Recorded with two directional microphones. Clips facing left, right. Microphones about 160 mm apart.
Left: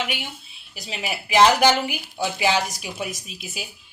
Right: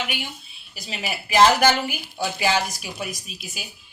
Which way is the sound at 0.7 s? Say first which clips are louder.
Left 1 dB; 20° left (ahead or behind).